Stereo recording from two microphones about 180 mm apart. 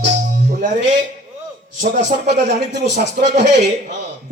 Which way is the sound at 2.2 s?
70° right (ahead or behind).